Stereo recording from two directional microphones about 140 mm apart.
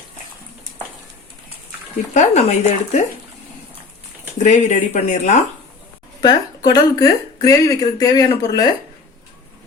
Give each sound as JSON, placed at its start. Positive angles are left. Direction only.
{"t": 2.1, "sound": "speech", "side_deg": 55}
{"t": 4.4, "sound": "speech", "side_deg": 60}
{"t": 6.2, "sound": "speech", "side_deg": 30}